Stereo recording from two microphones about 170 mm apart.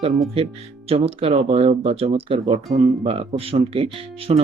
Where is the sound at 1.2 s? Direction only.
35° right (ahead or behind).